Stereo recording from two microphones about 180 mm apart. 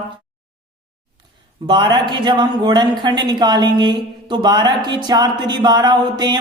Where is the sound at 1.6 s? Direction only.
25° right (ahead or behind).